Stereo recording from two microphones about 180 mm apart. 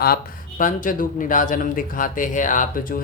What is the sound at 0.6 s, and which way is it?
Speech, 45° left (ahead or behind).